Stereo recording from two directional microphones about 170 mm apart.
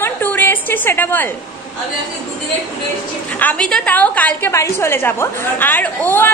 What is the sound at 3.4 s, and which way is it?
A woman's voice, 5° left (ahead or behind).